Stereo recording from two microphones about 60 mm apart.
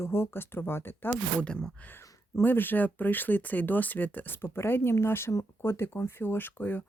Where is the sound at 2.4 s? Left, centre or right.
Left.